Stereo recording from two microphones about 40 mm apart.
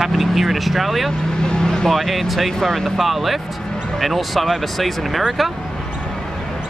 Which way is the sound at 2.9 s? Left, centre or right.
Centre.